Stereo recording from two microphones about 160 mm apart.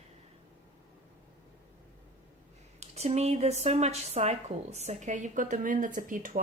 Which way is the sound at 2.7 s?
45° right (ahead or behind).